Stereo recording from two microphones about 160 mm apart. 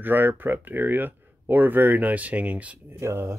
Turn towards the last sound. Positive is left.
turn(degrees=-15)  # may be behind; listen again after turning